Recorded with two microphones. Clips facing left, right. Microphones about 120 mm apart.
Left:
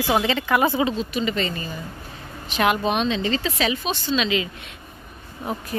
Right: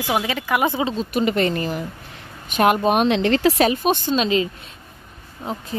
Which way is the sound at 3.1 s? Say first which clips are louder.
Right 7 dB; 70° right (ahead or behind).